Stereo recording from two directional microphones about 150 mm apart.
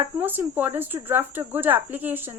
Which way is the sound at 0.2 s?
15° right (ahead or behind).